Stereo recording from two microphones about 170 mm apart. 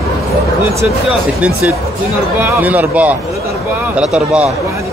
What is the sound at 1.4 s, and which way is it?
Speech, 5° right (ahead or behind).